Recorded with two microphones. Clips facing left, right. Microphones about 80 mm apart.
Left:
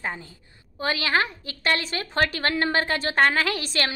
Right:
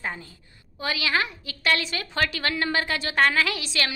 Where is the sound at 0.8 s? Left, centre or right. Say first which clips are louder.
Left 2 dB; left.